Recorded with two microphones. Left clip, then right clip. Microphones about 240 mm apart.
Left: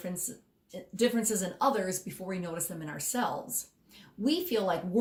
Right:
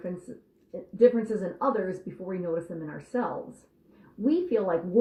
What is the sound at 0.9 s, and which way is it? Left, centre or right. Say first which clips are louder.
Speech: right 7 dB; left.